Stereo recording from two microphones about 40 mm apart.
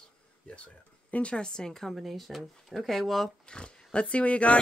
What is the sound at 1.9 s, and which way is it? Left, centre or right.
Speech, centre.